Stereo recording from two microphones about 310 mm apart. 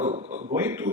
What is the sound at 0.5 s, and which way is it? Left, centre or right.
Speech, centre.